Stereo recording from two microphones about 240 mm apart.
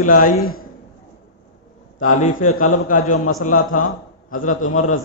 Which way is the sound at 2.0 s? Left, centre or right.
Left.